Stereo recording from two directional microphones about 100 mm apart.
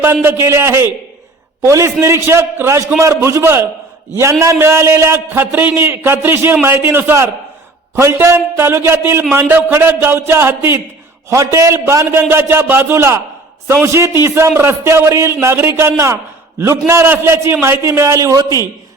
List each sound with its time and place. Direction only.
0.0 s a man's voice: 25° right (ahead or behind)